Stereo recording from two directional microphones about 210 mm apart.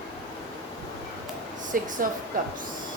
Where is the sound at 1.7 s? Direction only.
40° right (ahead or behind).